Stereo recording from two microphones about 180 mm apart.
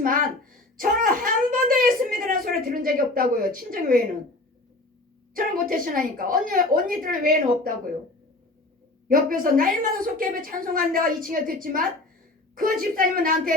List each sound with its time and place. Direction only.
0.0 s a sound: 50° right (ahead or behind)
0.8 s speech: 50° right (ahead or behind)
5.3 s a woman's voice: 50° right (ahead or behind)
9.0 s a woman's voice: 50° right (ahead or behind)